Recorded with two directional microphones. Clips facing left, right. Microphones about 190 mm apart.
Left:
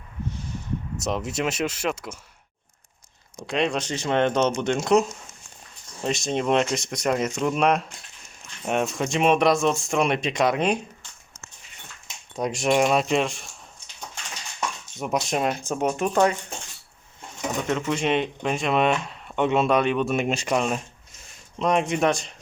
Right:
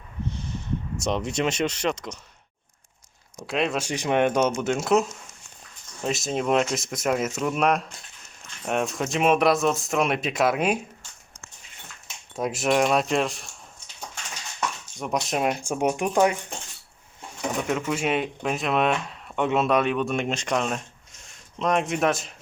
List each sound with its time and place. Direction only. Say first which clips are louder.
1.0 s speech: right 1 dB; 5° left (ahead or behind)
3.4 s speech: left 1 dB; 5° right (ahead or behind)
12.4 s speech: left 1 dB; centre (ahead or behind)
14.9 s speech: left 2 dB; centre (ahead or behind)
17.6 s speech: left 1 dB; 5° right (ahead or behind)